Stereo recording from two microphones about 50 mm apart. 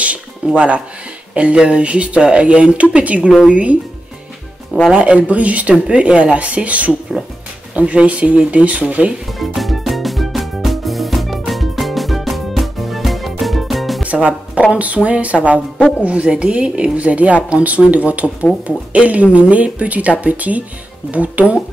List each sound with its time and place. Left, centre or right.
0.5 s speech: right
4.9 s speech: right
9.6 s music: centre
14.0 s music: right
14.7 s speech: right
16.9 s speech: right